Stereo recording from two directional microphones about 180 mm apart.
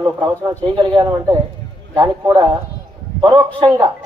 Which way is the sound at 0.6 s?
30° right (ahead or behind).